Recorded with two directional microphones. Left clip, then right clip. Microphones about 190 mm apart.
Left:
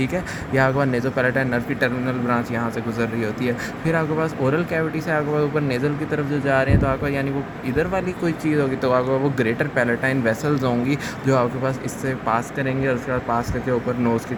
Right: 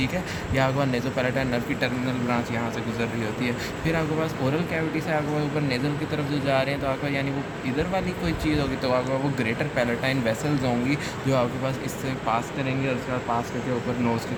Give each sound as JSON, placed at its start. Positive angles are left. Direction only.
{"t": 0.0, "sound": "speech", "side_deg": 50}
{"t": 6.5, "sound": "speech", "side_deg": 50}